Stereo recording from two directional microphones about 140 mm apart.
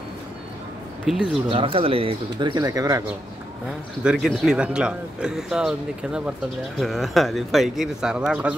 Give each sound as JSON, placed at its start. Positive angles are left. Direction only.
{"t": 1.0, "sound": "speech", "side_deg": 0}
{"t": 1.5, "sound": "speech", "side_deg": -40}
{"t": 4.0, "sound": "speech", "side_deg": -5}